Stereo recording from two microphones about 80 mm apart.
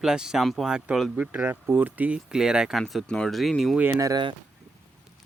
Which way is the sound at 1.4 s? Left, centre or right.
Right.